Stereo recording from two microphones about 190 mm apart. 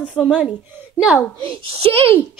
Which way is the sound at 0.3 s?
5° right (ahead or behind).